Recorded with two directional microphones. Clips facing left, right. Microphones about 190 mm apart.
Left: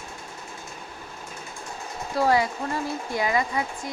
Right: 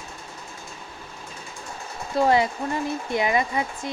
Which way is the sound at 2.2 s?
20° right (ahead or behind).